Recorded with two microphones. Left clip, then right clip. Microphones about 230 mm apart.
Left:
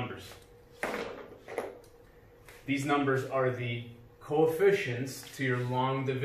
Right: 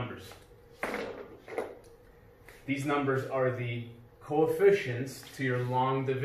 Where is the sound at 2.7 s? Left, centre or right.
Centre.